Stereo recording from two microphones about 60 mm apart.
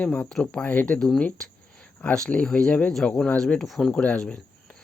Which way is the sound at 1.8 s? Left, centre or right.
Left.